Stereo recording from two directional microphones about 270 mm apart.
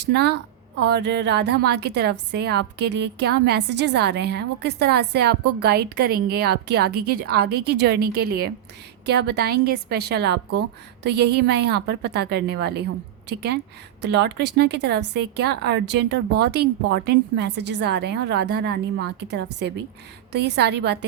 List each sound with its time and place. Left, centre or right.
0.0 s speech: right